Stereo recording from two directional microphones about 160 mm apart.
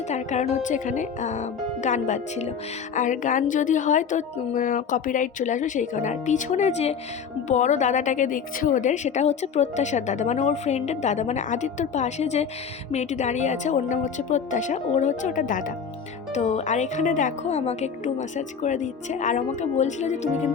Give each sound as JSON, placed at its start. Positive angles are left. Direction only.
{"t": 0.1, "sound": "a woman's voice", "side_deg": 45}
{"t": 16.3, "sound": "a woman's voice", "side_deg": 45}